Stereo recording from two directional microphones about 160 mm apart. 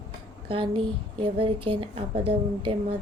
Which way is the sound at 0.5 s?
35° right (ahead or behind).